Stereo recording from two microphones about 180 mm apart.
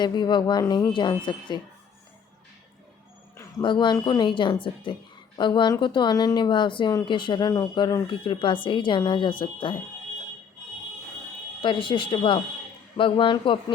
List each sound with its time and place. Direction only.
0.0 s a woman's voice: 25° left (ahead or behind)
3.6 s a woman's voice: 25° left (ahead or behind)
11.6 s a woman's voice: 25° left (ahead or behind)